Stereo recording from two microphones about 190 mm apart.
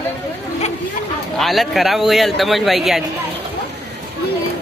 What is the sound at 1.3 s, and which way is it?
Speech, centre (ahead or behind).